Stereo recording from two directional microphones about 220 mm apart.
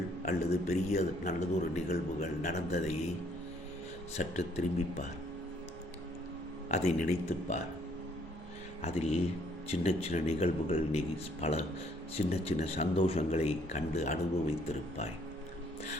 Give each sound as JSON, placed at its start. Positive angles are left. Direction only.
{"t": 0.3, "sound": "a man's voice", "side_deg": 30}
{"t": 4.2, "sound": "a man's voice", "side_deg": 30}
{"t": 6.7, "sound": "a man's voice", "side_deg": 30}
{"t": 8.8, "sound": "speech", "side_deg": 30}